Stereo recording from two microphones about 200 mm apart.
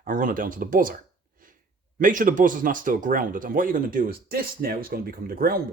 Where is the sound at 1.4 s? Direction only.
45° right (ahead or behind).